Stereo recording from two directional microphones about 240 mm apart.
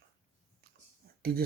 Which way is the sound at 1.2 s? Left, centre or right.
Right.